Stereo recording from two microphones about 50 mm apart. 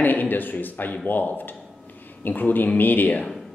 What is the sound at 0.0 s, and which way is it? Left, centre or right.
A man's voice, left.